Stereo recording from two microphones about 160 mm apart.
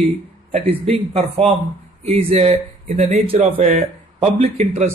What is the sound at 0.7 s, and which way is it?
Speech, 40° right (ahead or behind).